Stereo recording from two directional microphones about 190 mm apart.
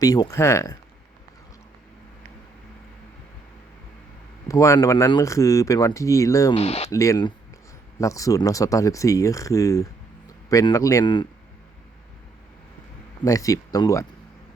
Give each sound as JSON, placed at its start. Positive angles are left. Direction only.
{"t": 0.0, "sound": "speech", "side_deg": 20}
{"t": 4.4, "sound": "speech", "side_deg": 15}
{"t": 6.6, "sound": "speech", "side_deg": 35}
{"t": 6.9, "sound": "speech", "side_deg": 15}
{"t": 13.2, "sound": "speech", "side_deg": 15}